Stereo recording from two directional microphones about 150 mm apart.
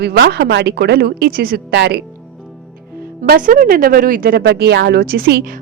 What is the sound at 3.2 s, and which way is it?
Speech, 65° right (ahead or behind).